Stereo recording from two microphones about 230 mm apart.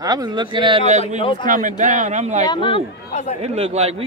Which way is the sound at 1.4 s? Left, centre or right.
Right.